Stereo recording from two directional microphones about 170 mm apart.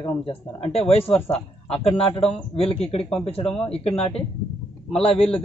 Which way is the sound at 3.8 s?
35° left (ahead or behind).